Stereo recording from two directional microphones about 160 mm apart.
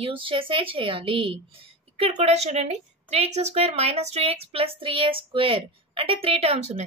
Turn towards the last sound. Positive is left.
turn(degrees=-45)  # may be behind; listen again after turning